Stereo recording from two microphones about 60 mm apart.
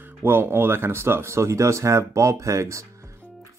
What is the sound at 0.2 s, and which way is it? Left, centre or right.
Speech, right.